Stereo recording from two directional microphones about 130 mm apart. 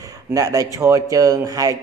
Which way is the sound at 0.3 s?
25° right (ahead or behind).